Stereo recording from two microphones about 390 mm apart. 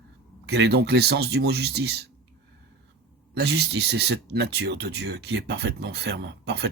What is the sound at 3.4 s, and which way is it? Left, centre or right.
Speech, right.